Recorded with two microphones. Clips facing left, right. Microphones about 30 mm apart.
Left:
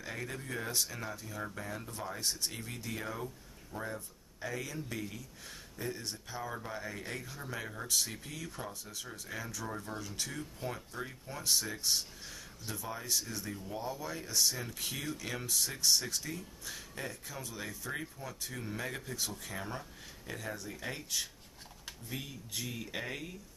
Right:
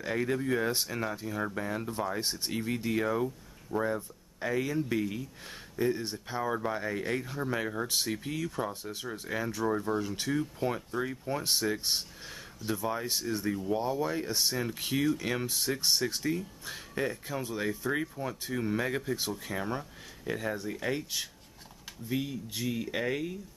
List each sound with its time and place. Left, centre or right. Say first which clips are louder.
0.0 s speech: right 11 dB; right
8.4 s speech: right 10 dB; centre
8.6 s speech: right 7 dB; right